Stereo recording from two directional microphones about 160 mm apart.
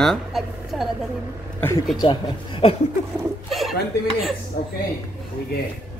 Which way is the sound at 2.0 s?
35° left (ahead or behind).